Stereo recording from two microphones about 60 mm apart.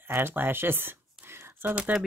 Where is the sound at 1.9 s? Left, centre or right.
Right.